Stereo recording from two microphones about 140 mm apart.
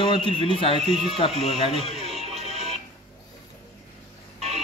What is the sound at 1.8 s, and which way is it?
Music, 50° right (ahead or behind).